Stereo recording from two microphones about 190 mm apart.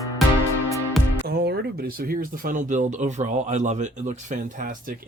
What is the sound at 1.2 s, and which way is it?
Speech, 60° right (ahead or behind).